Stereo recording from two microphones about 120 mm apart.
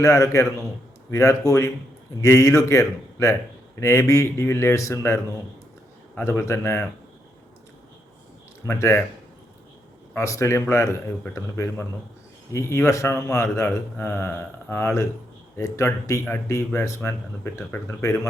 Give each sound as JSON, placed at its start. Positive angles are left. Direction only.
{"t": 0.0, "sound": "speech", "side_deg": 25}
{"t": 8.6, "sound": "speech", "side_deg": 25}
{"t": 10.2, "sound": "speech", "side_deg": 25}